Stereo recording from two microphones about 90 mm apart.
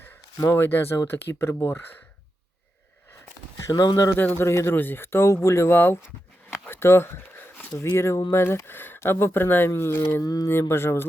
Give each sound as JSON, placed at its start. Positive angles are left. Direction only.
{"t": 0.3, "sound": "speech", "side_deg": 40}
{"t": 0.6, "sound": "speech", "side_deg": 25}
{"t": 3.7, "sound": "speech", "side_deg": 50}
{"t": 4.1, "sound": "speech", "side_deg": 25}
{"t": 6.7, "sound": "a sound", "side_deg": 25}
{"t": 7.8, "sound": "speech", "side_deg": 30}
{"t": 10.2, "sound": "speech", "side_deg": 45}
{"t": 10.5, "sound": "speech", "side_deg": 25}